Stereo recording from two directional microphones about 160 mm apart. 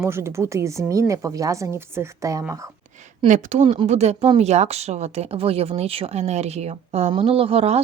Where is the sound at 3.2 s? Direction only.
50° right (ahead or behind).